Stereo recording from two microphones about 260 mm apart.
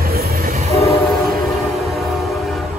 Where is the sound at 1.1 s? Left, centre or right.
Centre.